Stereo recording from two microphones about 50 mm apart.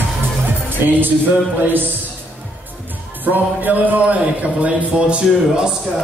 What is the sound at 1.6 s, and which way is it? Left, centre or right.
Speech, right.